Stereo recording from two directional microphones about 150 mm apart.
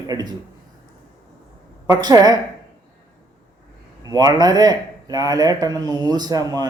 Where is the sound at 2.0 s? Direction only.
25° right (ahead or behind).